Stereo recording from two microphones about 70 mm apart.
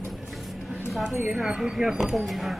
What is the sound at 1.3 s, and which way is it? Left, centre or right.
Speech, centre.